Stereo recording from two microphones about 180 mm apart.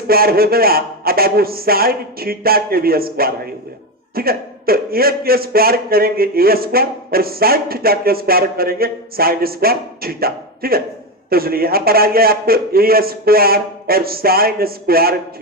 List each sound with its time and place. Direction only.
0.1 s a man's voice: 55° right (ahead or behind)